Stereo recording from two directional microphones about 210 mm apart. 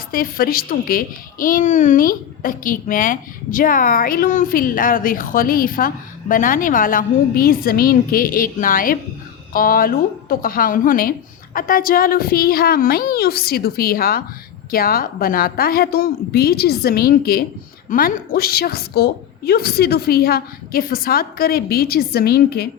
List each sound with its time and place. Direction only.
0.1 s a child's voice: 45° left (ahead or behind)